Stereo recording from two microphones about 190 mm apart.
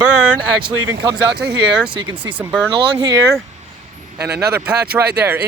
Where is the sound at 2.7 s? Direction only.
20° right (ahead or behind).